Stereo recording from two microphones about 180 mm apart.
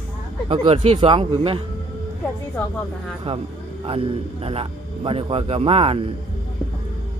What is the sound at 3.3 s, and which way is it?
A man's voice, 30° right (ahead or behind).